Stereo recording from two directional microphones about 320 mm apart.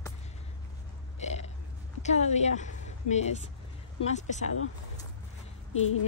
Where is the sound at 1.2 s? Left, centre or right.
Left.